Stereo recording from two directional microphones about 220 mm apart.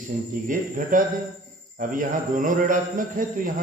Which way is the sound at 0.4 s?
40° right (ahead or behind).